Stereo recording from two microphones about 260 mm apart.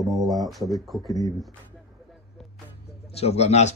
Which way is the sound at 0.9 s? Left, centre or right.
Centre.